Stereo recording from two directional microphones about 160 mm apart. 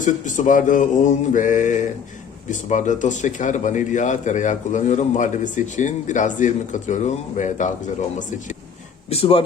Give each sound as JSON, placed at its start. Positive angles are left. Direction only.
{"t": 0.0, "sound": "speech", "side_deg": 55}
{"t": 9.0, "sound": "speech", "side_deg": 35}